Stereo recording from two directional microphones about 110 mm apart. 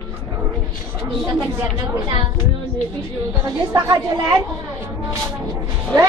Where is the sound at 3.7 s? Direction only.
30° right (ahead or behind).